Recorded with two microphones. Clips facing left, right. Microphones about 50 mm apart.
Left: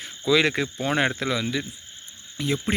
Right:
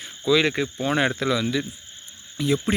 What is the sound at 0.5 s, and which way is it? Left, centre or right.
Speech, left.